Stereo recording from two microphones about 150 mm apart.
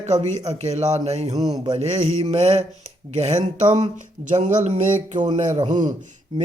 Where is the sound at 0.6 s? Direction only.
45° right (ahead or behind).